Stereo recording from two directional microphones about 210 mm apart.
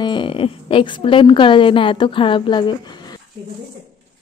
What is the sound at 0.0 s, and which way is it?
A woman's voice, 25° left (ahead or behind).